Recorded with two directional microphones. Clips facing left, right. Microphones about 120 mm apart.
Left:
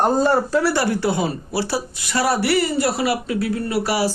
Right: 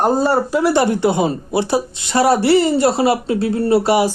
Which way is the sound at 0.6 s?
20° right (ahead or behind).